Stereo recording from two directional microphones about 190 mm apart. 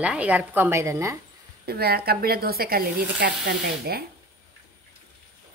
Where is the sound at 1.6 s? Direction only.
55° right (ahead or behind).